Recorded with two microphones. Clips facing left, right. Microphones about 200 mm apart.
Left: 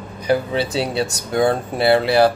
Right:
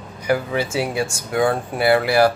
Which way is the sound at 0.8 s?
10° right (ahead or behind).